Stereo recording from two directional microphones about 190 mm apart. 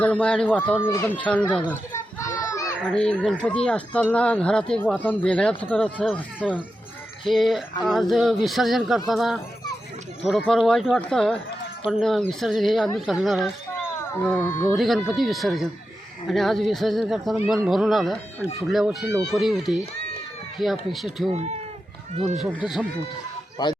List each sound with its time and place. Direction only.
0.0 s speech: 5° left (ahead or behind)
1.7 s children playing: 15° left (ahead or behind)
2.9 s speech: 5° left (ahead or behind)
14.0 s speech: 10° left (ahead or behind)
21.3 s speech: 35° right (ahead or behind)
22.4 s speech: centre (ahead or behind)
23.6 s speech: 20° left (ahead or behind)